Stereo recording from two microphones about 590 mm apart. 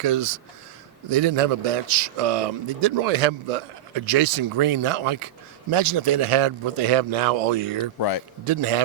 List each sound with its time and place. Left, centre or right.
0.0 s a man's voice: right